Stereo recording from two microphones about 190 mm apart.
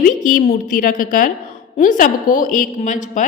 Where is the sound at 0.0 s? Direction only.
45° left (ahead or behind).